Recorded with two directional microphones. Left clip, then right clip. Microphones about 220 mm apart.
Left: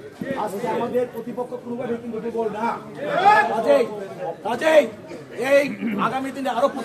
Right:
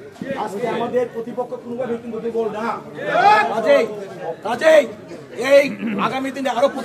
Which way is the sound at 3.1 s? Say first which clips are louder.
Right 2 dB; 35° right (ahead or behind).